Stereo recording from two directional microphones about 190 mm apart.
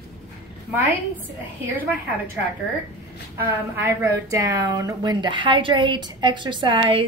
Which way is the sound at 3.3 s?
10° right (ahead or behind).